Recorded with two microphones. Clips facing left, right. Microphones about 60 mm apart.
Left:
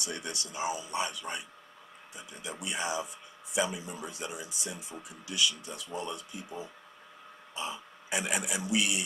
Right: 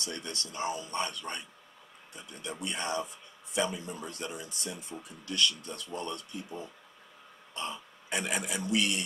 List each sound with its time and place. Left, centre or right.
0.0 s speech: centre